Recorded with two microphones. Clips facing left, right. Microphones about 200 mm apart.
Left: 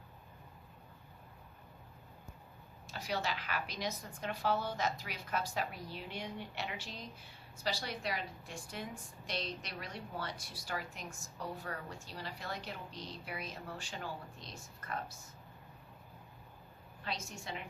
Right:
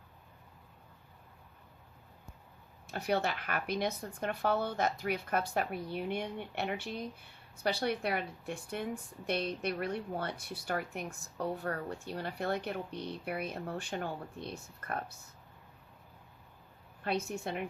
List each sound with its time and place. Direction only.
2.8 s a woman's voice: 55° right (ahead or behind)
17.0 s a woman's voice: 60° right (ahead or behind)